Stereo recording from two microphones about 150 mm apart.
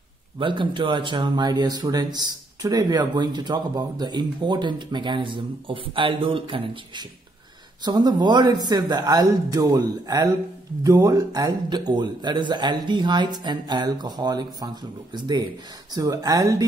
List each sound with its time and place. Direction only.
0.4 s a man's voice: 35° right (ahead or behind)